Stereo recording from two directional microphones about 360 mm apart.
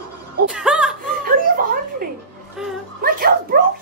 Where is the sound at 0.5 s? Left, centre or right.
Centre.